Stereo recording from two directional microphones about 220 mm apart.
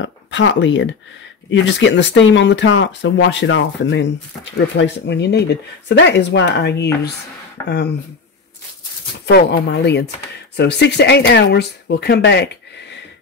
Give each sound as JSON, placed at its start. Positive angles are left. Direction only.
{"t": 0.0, "sound": "speech", "side_deg": 55}
{"t": 9.2, "sound": "speech", "side_deg": 50}